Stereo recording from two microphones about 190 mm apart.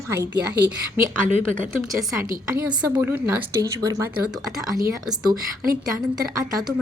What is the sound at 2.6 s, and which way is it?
Speech, 10° right (ahead or behind).